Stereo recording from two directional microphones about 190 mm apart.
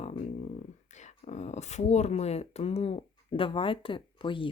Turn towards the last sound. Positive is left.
turn(degrees=25)  # may be behind; listen again after turning